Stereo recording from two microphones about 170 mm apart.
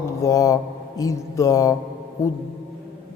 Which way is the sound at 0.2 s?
20° left (ahead or behind).